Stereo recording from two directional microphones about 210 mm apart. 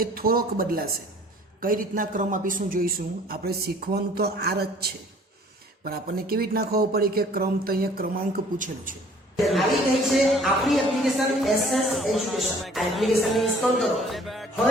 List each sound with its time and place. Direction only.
0.0 s a man's voice: 45° right (ahead or behind)
9.4 s speech: centre (ahead or behind)